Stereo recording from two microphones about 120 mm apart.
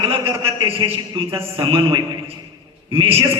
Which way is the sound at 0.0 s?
50° right (ahead or behind).